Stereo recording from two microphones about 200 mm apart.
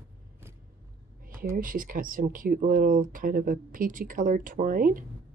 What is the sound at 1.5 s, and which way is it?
Speech, 45° right (ahead or behind).